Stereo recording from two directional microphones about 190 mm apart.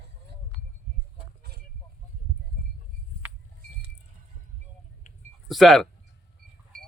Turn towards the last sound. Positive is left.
turn(degrees=0)  # may be behind; listen again after turning